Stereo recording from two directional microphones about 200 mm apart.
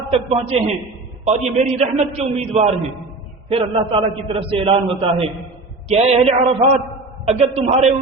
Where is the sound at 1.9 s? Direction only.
30° right (ahead or behind).